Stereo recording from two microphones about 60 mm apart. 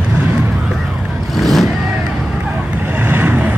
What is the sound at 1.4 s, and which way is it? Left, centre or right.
Vehicle, centre.